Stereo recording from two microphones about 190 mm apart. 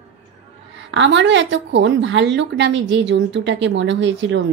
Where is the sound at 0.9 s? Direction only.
75° right (ahead or behind).